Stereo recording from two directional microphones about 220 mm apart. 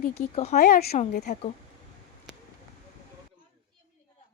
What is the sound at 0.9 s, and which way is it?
Speech, 30° left (ahead or behind).